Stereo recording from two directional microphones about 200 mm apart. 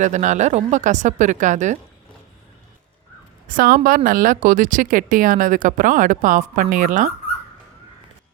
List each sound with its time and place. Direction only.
0.0 s a woman's voice: 35° right (ahead or behind)
3.4 s a woman's voice: 45° right (ahead or behind)